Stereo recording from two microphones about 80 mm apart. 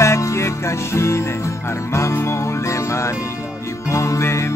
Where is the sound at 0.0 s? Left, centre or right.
Left.